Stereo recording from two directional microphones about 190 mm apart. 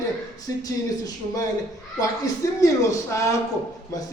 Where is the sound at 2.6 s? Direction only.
15° left (ahead or behind).